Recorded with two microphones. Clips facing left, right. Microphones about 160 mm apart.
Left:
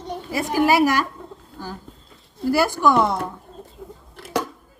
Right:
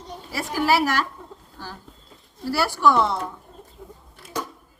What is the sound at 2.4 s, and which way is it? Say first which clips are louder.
Speech: left 2 dB; 20° left (ahead or behind).